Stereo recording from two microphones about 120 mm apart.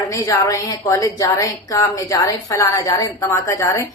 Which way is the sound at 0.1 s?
25° left (ahead or behind).